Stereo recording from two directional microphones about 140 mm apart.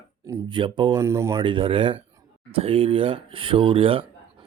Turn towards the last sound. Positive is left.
turn(degrees=-40)  # may be behind; listen again after turning